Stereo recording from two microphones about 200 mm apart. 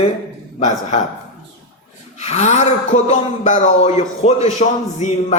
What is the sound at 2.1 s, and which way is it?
Speech, 35° left (ahead or behind).